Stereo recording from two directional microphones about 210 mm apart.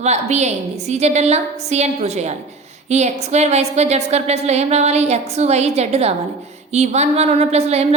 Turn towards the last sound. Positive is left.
turn(degrees=-30)  # may be behind; listen again after turning